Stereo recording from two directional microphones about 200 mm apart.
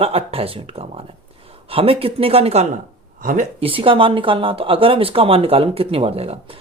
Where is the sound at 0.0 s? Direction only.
30° right (ahead or behind).